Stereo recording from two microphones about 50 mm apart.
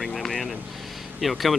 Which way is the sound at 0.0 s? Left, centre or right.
Centre.